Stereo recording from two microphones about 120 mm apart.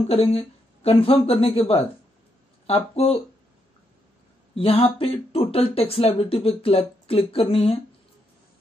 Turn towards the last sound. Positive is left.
turn(degrees=55)  # may be behind; listen again after turning